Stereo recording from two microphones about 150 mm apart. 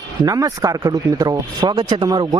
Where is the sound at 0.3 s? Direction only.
25° right (ahead or behind).